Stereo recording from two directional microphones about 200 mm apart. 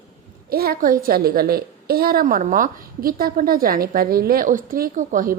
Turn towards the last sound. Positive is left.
turn(degrees=-40)  # may be behind; listen again after turning